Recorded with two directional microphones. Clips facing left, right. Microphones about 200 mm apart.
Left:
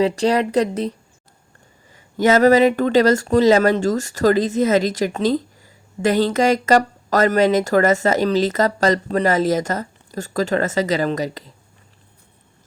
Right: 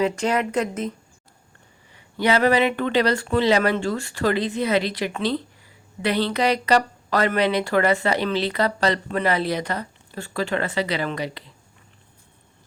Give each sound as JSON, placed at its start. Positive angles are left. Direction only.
{"t": 0.0, "sound": "speech", "side_deg": 35}